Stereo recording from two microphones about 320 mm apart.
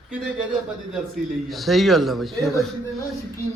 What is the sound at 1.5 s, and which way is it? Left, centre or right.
A man's voice, centre.